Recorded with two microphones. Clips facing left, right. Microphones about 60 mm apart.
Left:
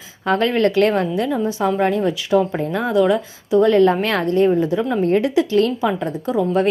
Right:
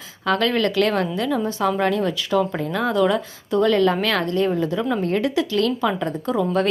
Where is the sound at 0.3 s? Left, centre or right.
Left.